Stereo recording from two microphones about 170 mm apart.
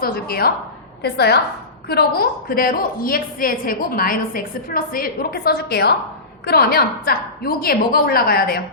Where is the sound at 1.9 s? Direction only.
65° left (ahead or behind).